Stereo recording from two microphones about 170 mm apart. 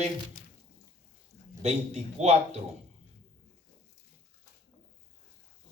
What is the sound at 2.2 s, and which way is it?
Speech, 40° right (ahead or behind).